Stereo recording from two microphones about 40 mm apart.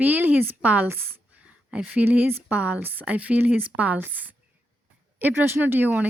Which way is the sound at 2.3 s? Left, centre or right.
Right.